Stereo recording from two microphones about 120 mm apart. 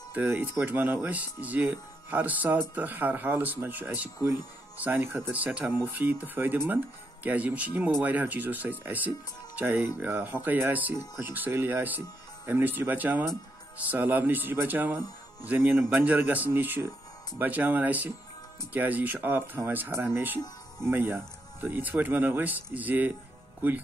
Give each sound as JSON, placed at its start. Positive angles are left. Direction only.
{"t": 0.1, "sound": "speech", "side_deg": -15}